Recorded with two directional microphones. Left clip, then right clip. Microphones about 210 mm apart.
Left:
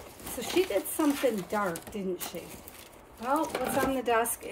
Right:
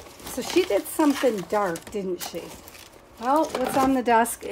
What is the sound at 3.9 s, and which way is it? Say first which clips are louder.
Speech: right 8 dB; 40° right (ahead or behind).